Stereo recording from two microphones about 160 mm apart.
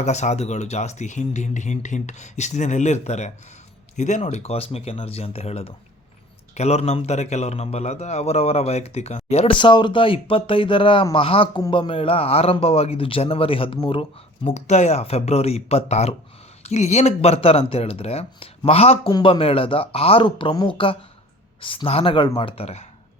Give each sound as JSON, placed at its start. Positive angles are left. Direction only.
{"t": 0.0, "sound": "speech", "side_deg": 45}